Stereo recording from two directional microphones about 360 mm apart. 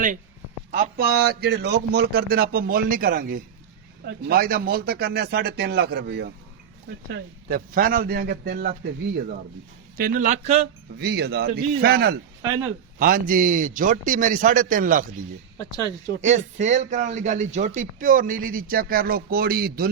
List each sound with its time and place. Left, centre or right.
0.7 s speech: right
10.0 s speech: right
12.4 s speech: centre
13.0 s speech: right
15.5 s speech: centre
16.2 s speech: centre